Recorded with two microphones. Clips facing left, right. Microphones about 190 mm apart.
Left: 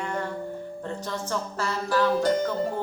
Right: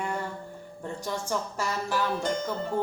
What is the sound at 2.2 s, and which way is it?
Music, 35° left (ahead or behind).